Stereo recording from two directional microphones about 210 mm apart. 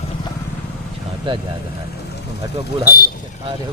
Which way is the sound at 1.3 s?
25° right (ahead or behind).